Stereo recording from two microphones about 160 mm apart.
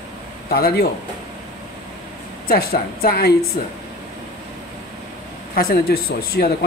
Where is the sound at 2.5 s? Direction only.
70° left (ahead or behind).